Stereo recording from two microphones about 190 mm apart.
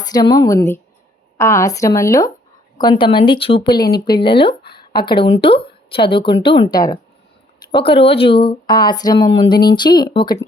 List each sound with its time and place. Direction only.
0.0 s a woman's voice: 20° left (ahead or behind)
4.8 s a sound: 25° left (ahead or behind)
5.4 s a woman's voice: 30° left (ahead or behind)